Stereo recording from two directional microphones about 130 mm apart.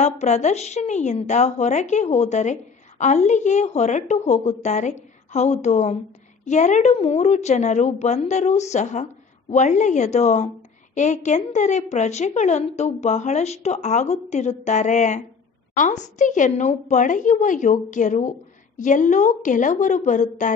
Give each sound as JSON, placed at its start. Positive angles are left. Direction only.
{"t": 0.0, "sound": "a woman's voice", "side_deg": 65}